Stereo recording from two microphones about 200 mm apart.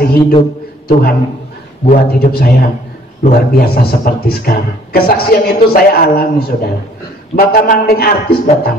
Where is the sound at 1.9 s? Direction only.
50° left (ahead or behind).